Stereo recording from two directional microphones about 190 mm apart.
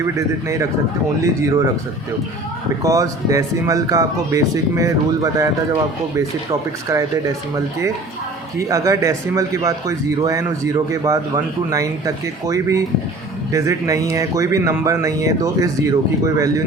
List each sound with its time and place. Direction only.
0.0 s speech: 15° right (ahead or behind)
2.8 s speech: 20° right (ahead or behind)